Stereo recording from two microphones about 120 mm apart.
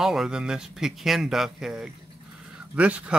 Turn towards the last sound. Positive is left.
turn(degrees=-10)  # may be behind; listen again after turning